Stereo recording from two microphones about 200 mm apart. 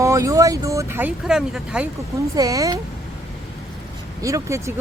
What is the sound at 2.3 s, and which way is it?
Speech, 15° right (ahead or behind).